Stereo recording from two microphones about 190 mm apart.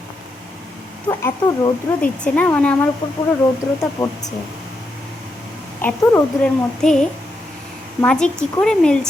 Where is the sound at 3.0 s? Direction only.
25° left (ahead or behind).